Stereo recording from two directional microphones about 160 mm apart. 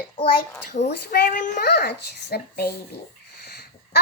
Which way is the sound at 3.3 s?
85° left.